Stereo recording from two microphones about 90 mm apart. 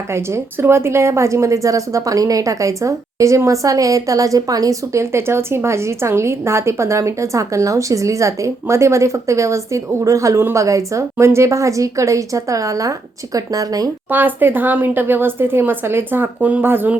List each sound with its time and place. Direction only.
0.1 s a woman's voice: 30° right (ahead or behind)
14.1 s speech: 20° right (ahead or behind)